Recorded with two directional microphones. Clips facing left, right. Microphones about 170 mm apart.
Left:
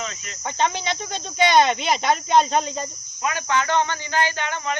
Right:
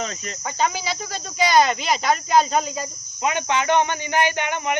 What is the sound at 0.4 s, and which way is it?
Speech, 5° right (ahead or behind).